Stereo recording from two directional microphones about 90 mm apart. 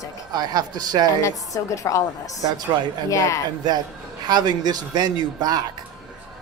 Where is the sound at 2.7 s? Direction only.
55° right (ahead or behind).